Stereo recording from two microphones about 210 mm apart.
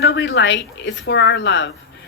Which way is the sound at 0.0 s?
60° left (ahead or behind).